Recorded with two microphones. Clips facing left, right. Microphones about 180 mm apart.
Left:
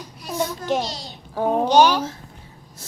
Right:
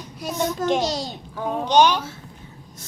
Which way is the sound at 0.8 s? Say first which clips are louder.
Right 7 dB; 45° right (ahead or behind).